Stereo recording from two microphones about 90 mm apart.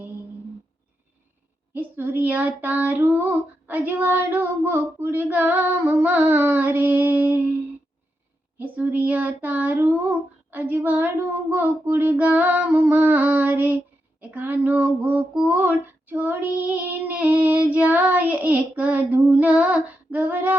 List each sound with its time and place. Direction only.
1.7 s a child's voice: 20° right (ahead or behind)
8.5 s a child's voice: 20° right (ahead or behind)